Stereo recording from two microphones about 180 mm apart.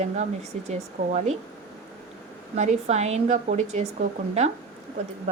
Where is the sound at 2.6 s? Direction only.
40° right (ahead or behind).